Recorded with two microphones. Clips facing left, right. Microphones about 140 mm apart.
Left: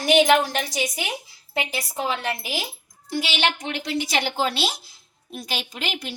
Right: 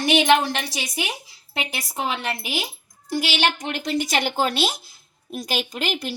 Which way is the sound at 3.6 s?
45° right (ahead or behind).